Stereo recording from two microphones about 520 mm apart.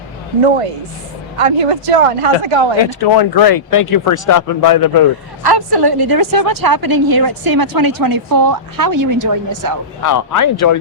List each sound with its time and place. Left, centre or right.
1.4 s speech: right
2.8 s speech: left
5.4 s a woman's voice: right
10.0 s speech: left